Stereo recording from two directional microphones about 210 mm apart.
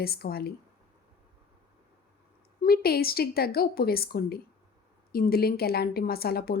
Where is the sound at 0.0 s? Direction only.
45° left (ahead or behind).